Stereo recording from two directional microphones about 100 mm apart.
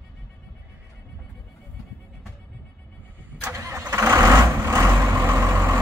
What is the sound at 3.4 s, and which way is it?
Vehicle, 30° right (ahead or behind).